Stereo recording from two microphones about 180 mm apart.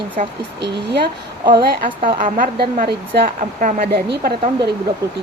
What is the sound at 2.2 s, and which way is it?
A woman's voice, 50° right (ahead or behind).